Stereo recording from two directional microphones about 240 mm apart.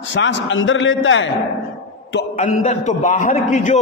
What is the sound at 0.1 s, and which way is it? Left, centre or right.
A man's voice, left.